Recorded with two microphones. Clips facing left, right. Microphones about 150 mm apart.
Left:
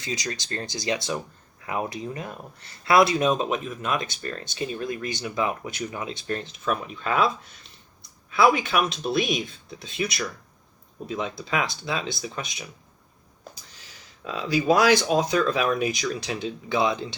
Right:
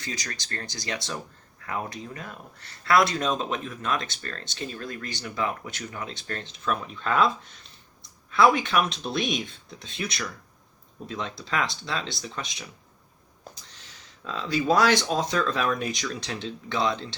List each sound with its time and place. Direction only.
0.0 s speech: 15° left (ahead or behind)
14.3 s speech: 10° left (ahead or behind)